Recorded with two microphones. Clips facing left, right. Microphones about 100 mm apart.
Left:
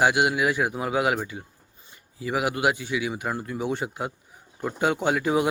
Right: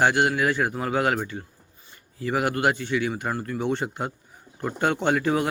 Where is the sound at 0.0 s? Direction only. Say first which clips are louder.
Even; 10° left (ahead or behind).